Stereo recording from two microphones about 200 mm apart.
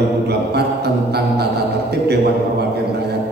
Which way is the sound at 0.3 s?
55° right (ahead or behind).